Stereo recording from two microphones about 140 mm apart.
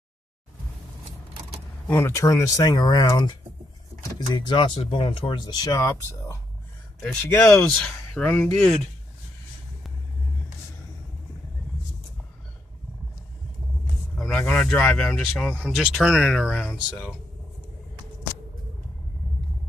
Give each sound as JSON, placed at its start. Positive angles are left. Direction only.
{"t": 1.9, "sound": "speech", "side_deg": 15}
{"t": 14.1, "sound": "speech", "side_deg": 5}